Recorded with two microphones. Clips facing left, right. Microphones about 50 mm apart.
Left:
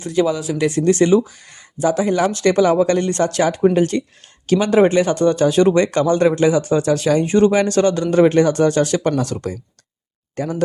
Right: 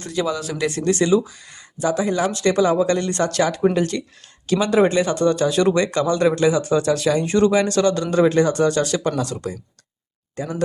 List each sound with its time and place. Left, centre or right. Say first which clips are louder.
0.1 s speech: left 5 dB; left